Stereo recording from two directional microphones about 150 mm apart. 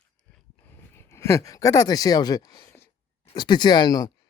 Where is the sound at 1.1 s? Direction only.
20° left (ahead or behind).